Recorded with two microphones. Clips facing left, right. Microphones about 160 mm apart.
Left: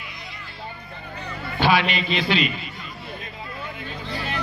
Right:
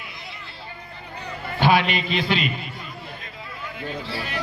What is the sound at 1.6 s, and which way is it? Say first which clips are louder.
Speech: right 1 dB; 50° right (ahead or behind).